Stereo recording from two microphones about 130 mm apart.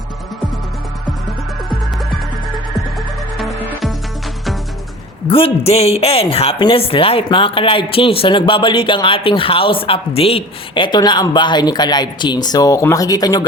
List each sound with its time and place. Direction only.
3.3 s music: centre (ahead or behind)
5.3 s a man's voice: 50° left (ahead or behind); by 13.4 s 30° left (ahead or behind)